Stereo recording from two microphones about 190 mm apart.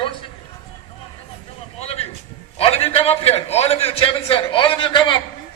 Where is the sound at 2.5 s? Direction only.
30° left (ahead or behind).